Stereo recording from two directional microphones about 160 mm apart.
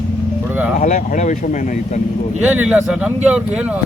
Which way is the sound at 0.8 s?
50° left (ahead or behind).